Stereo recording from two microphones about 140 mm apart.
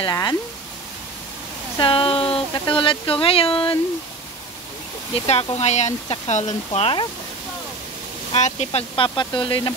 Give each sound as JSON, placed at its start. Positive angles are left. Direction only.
{"t": 0.0, "sound": "speech", "side_deg": 30}
{"t": 1.8, "sound": "speech", "side_deg": 40}
{"t": 5.2, "sound": "speech", "side_deg": 45}
{"t": 8.3, "sound": "speech", "side_deg": 55}